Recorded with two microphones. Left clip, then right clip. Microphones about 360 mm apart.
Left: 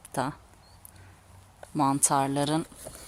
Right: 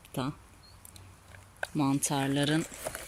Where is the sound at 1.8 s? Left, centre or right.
Left.